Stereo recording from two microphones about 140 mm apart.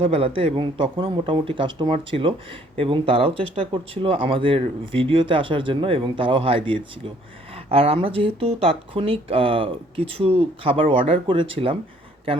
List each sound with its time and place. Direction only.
0.0 s speech: 45° right (ahead or behind)